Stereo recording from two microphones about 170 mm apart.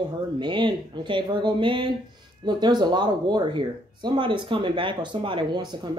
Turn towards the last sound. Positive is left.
turn(degrees=-25)  # may be behind; listen again after turning